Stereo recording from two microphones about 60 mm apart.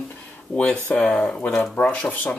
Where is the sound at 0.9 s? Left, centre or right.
Centre.